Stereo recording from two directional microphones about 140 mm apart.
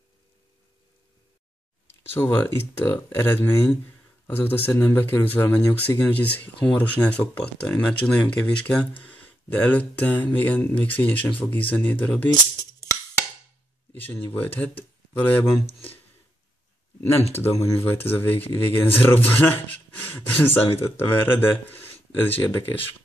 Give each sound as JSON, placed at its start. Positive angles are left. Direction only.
{"t": 1.9, "sound": "speech", "side_deg": 15}
{"t": 13.9, "sound": "speech", "side_deg": 15}
{"t": 15.6, "sound": "speech", "side_deg": 45}
{"t": 17.3, "sound": "speech", "side_deg": 20}